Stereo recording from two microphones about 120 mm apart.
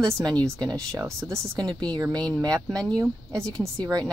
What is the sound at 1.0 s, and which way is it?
Speech, 25° right (ahead or behind).